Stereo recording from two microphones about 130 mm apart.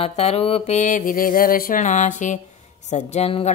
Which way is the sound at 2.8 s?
60° left (ahead or behind).